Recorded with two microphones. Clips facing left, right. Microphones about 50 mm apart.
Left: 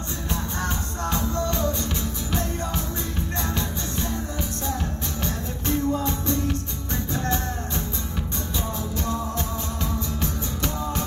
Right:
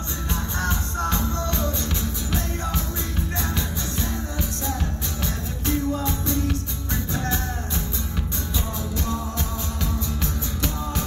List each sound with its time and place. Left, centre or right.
1.3 s music: left
5.7 s music: left
10.6 s music: left